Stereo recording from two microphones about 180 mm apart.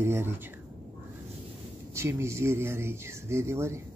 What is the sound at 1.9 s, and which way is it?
Speech, 15° right (ahead or behind).